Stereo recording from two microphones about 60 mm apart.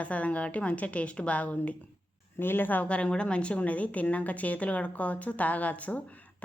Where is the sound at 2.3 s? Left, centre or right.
Left.